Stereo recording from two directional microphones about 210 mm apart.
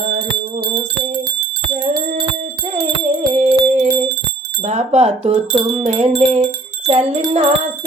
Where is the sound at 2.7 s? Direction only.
30° right (ahead or behind).